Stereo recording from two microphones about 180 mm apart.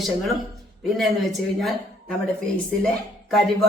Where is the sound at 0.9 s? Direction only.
Centre (ahead or behind).